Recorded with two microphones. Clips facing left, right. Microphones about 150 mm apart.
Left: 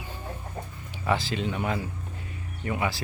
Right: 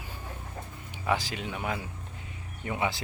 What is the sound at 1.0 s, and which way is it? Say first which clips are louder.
Speech: left 3 dB; 15° right (ahead or behind).